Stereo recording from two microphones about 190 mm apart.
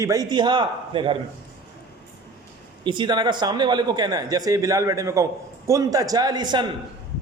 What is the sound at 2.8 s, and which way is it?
Speech, 25° right (ahead or behind).